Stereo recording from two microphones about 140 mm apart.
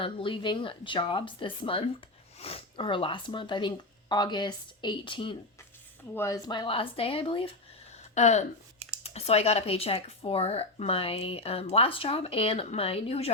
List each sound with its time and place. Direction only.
0.0 s speech: 40° left (ahead or behind)
6.1 s speech: 20° left (ahead or behind); by 7.5 s 40° left (ahead or behind)
8.1 s speech: 55° left (ahead or behind)